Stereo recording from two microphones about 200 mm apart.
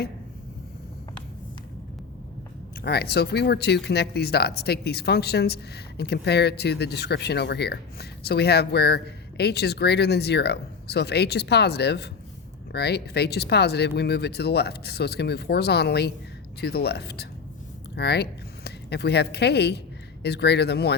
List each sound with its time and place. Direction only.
2.8 s speech: 55° left (ahead or behind)